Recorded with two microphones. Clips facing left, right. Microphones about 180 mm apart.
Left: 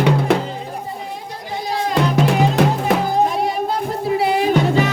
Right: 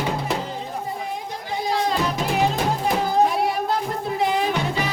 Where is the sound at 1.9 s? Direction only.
75° left (ahead or behind).